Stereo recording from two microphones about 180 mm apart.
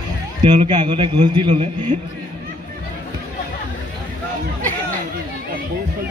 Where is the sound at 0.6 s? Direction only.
30° right (ahead or behind).